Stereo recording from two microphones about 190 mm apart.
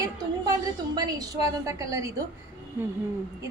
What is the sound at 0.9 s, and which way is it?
A woman's voice, 20° right (ahead or behind).